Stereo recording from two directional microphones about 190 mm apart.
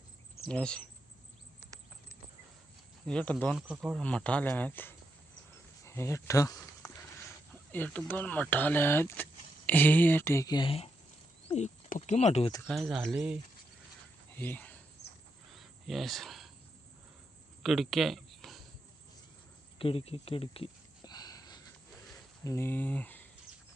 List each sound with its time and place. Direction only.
0.4 s speech: 5° left (ahead or behind)
3.1 s speech: 5° left (ahead or behind)
5.8 s a sound: 15° left (ahead or behind)
7.7 s speech: 10° left (ahead or behind); by 12.5 s 35° left (ahead or behind)
12.6 s speech: centre (ahead or behind)
14.3 s cricket: 10° left (ahead or behind)
17.6 s a sound: centre (ahead or behind)
19.8 s a sound: 30° left (ahead or behind)
22.4 s speech: 15° left (ahead or behind)